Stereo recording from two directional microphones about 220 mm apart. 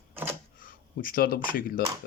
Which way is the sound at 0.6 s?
40° left (ahead or behind).